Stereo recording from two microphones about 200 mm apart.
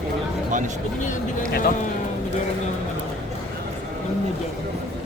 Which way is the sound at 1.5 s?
50° left (ahead or behind).